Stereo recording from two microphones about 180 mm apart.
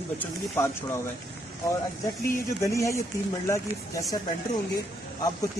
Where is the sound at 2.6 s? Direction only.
15° left (ahead or behind).